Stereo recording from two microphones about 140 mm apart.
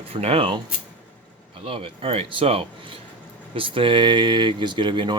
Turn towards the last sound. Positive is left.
turn(degrees=-35)  # may be behind; listen again after turning